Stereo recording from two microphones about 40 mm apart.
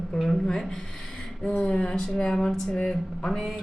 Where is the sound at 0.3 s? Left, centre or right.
Centre.